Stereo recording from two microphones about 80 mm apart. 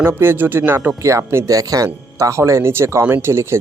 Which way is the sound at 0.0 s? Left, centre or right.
Right.